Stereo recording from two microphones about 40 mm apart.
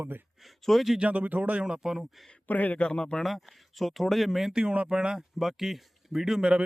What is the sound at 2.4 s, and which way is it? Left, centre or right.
Speech, left.